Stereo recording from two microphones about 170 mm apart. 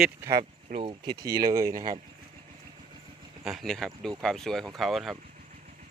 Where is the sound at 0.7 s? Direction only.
30° right (ahead or behind).